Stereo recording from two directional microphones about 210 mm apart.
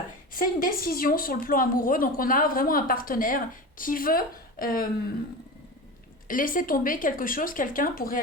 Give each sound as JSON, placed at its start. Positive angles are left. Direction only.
{"t": 0.3, "sound": "a woman's voice", "side_deg": 45}
{"t": 6.2, "sound": "speech", "side_deg": 40}